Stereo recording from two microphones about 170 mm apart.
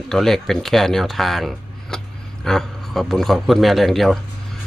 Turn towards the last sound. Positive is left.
turn(degrees=0)  # may be behind; listen again after turning